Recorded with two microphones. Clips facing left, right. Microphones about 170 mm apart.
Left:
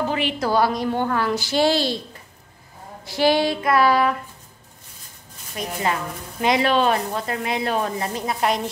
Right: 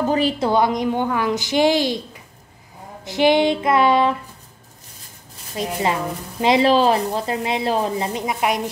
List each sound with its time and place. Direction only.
0.0 s a woman's voice: 40° right (ahead or behind)
0.4 s a woman's voice: 20° right (ahead or behind)
3.1 s speech: 20° right (ahead or behind)
5.6 s speech: 25° right (ahead or behind)